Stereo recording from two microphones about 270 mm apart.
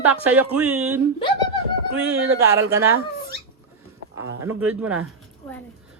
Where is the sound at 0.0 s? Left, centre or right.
Centre.